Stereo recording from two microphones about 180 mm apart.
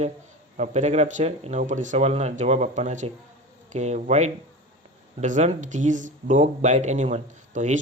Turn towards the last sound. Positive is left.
turn(degrees=-40)  # may be behind; listen again after turning